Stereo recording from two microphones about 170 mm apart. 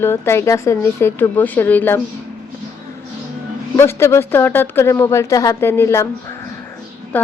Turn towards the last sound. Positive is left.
turn(degrees=10)  # may be behind; listen again after turning